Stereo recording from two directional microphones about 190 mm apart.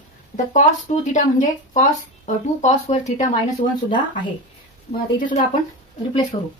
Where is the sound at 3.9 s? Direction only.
25° left (ahead or behind).